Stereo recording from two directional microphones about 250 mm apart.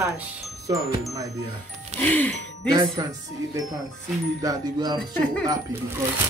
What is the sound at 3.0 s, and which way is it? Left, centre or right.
Speech, centre.